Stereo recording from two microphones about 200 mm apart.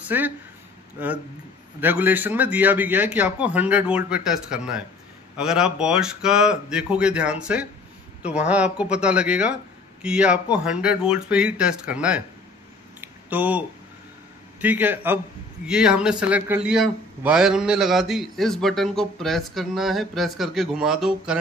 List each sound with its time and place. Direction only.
0.1 s a man's voice: 10° right (ahead or behind)
13.0 s a sound: 10° right (ahead or behind)
14.6 s a man's voice: 10° right (ahead or behind)